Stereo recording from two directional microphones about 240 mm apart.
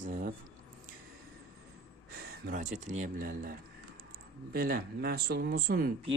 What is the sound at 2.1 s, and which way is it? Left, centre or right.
Speech, right.